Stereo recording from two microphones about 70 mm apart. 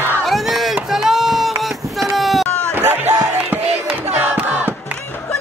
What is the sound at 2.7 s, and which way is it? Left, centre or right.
Music, right.